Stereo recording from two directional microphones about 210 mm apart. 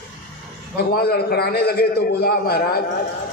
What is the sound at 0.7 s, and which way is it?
A man's voice, 50° left (ahead or behind).